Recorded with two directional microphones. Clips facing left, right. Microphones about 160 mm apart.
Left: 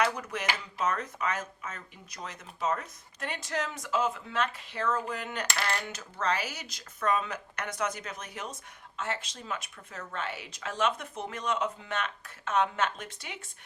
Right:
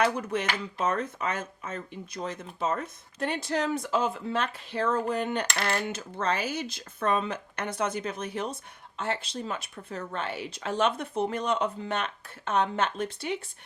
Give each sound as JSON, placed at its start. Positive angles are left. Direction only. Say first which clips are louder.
{"t": 0.0, "sound": "speech", "louder": "right 3 dB", "side_deg": -30}